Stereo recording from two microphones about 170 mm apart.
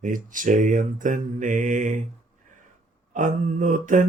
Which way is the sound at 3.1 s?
45° right (ahead or behind).